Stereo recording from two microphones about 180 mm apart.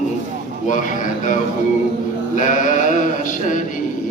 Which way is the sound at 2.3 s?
45° left (ahead or behind).